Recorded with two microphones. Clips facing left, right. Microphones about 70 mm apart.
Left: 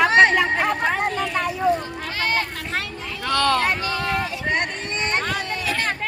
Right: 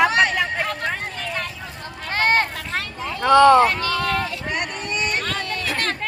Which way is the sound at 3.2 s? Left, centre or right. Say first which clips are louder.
Right 9 dB; centre.